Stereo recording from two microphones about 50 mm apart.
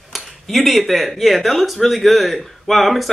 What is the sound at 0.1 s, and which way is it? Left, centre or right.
Speech, centre.